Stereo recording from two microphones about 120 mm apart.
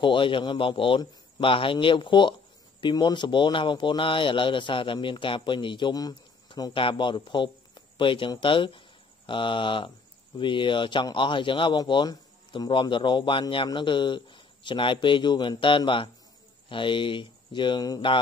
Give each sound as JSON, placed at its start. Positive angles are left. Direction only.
{"t": 0.0, "sound": "a man's voice", "side_deg": 45}